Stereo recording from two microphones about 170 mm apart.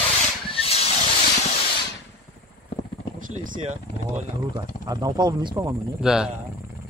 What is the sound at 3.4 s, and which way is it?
Speech, 50° right (ahead or behind).